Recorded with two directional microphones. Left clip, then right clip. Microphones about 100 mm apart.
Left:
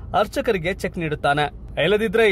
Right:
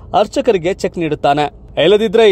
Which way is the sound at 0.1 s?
35° right (ahead or behind).